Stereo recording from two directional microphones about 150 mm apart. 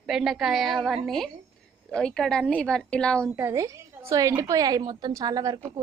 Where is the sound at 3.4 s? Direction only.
20° right (ahead or behind).